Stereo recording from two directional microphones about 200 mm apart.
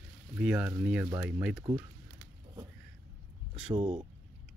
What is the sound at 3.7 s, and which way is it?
Speech, 30° right (ahead or behind).